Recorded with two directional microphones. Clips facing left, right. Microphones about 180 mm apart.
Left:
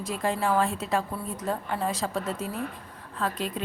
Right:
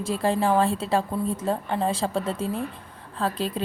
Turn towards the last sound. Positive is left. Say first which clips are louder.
# right 3 dB
turn(degrees=-30)  # may be behind; listen again after turning